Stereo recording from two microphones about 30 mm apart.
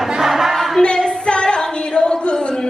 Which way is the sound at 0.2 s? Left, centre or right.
Centre.